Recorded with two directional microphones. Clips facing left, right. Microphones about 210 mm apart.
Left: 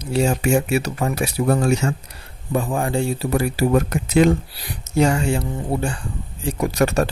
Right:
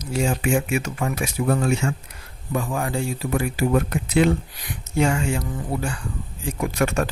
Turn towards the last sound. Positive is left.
turn(degrees=35)  # may be behind; listen again after turning